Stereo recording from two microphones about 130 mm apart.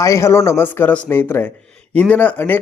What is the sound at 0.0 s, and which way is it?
A man's voice, 25° left (ahead or behind).